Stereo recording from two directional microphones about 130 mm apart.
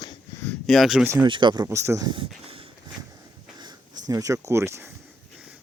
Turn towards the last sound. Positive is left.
turn(degrees=-20)  # may be behind; listen again after turning